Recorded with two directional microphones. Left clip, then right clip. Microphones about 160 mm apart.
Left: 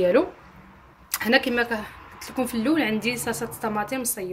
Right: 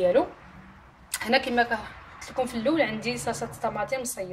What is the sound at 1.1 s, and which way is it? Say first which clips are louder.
Speech: left 2 dB; 40° left (ahead or behind).